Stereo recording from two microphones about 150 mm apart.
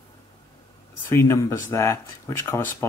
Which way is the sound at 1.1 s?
20° left (ahead or behind).